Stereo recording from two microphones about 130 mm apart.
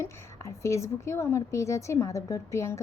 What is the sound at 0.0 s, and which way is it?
Speech, 25° left (ahead or behind).